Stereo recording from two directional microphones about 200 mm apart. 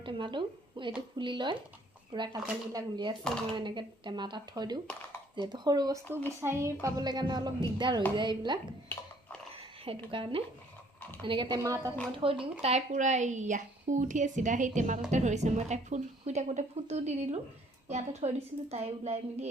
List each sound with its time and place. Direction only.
0.0 s speech: 25° right (ahead or behind)
6.1 s speech: 10° left (ahead or behind)
6.4 s speech: 15° right (ahead or behind)
9.5 s a sound: 30° right (ahead or behind)
11.2 s a woman's voice: 25° right (ahead or behind)